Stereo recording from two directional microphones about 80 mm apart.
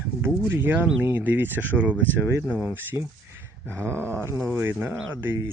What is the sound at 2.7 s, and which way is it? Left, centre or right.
Speech, right.